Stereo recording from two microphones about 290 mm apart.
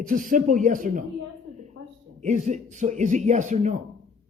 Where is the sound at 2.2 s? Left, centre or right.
Right.